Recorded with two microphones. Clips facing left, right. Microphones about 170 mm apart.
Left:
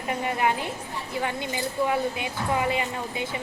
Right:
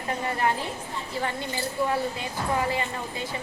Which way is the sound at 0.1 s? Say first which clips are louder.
Left 1 dB; 15° left (ahead or behind).